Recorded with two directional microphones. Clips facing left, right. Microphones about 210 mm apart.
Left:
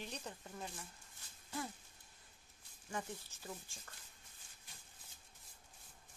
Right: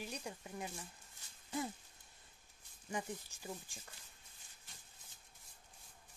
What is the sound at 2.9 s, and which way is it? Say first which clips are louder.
Speech: right 2 dB; 15° right (ahead or behind).